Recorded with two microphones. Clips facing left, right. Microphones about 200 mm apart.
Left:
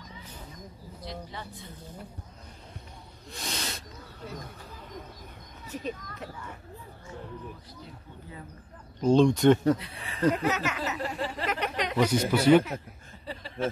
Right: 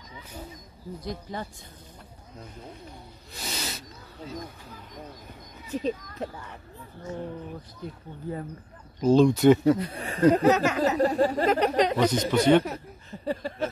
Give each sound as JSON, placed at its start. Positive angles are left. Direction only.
{"t": 1.0, "sound": "speech", "side_deg": -45}
{"t": 3.3, "sound": "snake", "side_deg": 0}
{"t": 5.7, "sound": "speech", "side_deg": -30}
{"t": 7.8, "sound": "speech", "side_deg": -50}
{"t": 9.0, "sound": "speech", "side_deg": -5}
{"t": 9.8, "sound": "speech", "side_deg": -45}
{"t": 12.0, "sound": "speech", "side_deg": 10}
{"t": 13.2, "sound": "a sound", "side_deg": -45}